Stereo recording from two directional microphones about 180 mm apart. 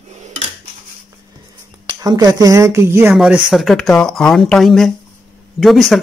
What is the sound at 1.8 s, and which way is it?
Speech, 25° right (ahead or behind).